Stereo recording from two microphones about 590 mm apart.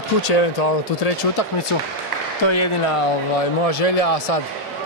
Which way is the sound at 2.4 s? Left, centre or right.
Left.